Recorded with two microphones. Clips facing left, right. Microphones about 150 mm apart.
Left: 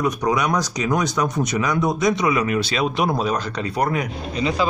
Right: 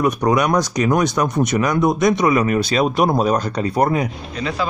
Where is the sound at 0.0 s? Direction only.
55° right (ahead or behind); by 4.1 s 30° right (ahead or behind).